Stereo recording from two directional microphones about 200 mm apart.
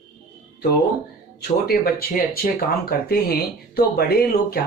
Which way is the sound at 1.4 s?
50° left (ahead or behind).